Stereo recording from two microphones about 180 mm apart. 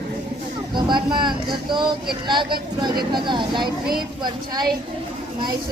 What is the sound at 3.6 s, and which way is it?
Speech, 55° right (ahead or behind).